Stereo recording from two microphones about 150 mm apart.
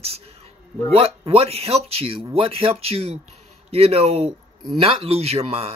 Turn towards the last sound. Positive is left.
turn(degrees=-40)  # may be behind; listen again after turning